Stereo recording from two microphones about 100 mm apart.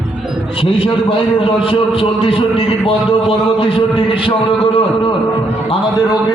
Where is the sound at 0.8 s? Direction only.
70° left (ahead or behind).